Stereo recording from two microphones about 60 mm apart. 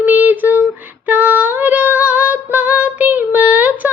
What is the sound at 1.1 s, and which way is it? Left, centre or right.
Female singing, right.